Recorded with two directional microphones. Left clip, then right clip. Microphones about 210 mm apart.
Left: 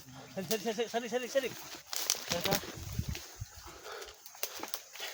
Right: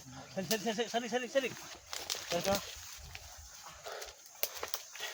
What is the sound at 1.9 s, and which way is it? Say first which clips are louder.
Crumpling: left 5 dB; 30° left (ahead or behind).